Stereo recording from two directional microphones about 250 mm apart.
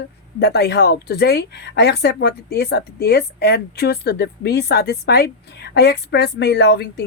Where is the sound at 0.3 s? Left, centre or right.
Left.